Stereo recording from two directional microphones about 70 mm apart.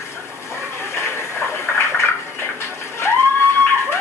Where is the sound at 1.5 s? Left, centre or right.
Left.